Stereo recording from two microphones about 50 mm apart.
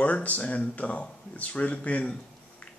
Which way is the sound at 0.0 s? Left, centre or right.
Left.